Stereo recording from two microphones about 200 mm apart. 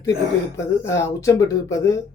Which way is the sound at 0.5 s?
15° left (ahead or behind).